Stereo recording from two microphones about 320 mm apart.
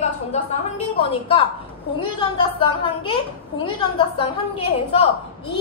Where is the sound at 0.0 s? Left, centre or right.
Left.